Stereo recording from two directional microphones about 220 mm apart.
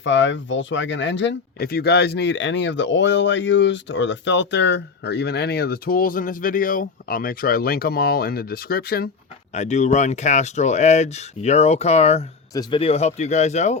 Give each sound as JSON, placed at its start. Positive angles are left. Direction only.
{"t": 0.0, "sound": "speech", "side_deg": 55}
{"t": 9.6, "sound": "speech", "side_deg": 30}